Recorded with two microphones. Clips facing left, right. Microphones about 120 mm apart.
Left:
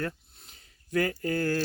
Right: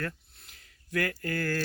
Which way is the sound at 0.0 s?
25° left (ahead or behind).